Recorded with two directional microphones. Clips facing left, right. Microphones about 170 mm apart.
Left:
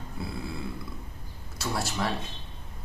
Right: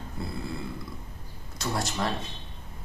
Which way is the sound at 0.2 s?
5° left (ahead or behind).